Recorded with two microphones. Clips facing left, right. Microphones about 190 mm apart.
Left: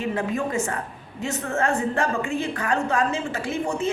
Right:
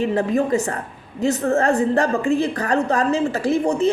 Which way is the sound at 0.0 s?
35° right (ahead or behind).